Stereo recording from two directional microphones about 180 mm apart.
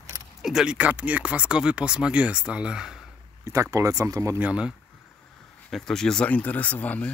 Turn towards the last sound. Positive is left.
turn(degrees=10)  # may be behind; listen again after turning